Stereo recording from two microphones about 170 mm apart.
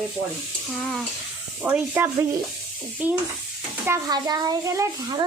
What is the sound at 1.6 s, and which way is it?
Speech, 10° right (ahead or behind).